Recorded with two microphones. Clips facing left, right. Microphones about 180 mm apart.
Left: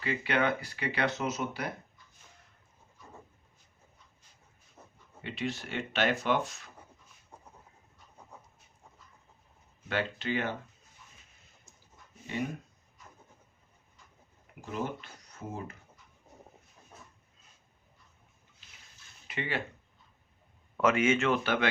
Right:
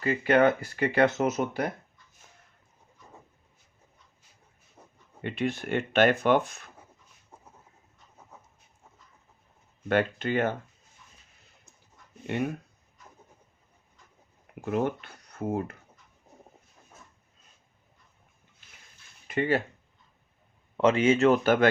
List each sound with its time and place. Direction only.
0.0 s speech: 45° right (ahead or behind)
4.8 s a sound: 10° right (ahead or behind)
5.2 s speech: 55° right (ahead or behind)
7.3 s chicken: 5° right (ahead or behind)
9.9 s speech: 50° right (ahead or behind)
12.3 s speech: 60° right (ahead or behind)
14.6 s speech: 60° right (ahead or behind)
18.6 s a sound: 50° right (ahead or behind)
19.3 s speech: 45° right (ahead or behind)
20.7 s speech: 30° right (ahead or behind)